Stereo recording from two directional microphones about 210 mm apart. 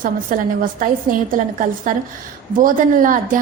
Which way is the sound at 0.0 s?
40° right (ahead or behind).